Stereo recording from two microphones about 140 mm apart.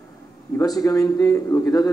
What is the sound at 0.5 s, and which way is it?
A man's voice, 25° left (ahead or behind).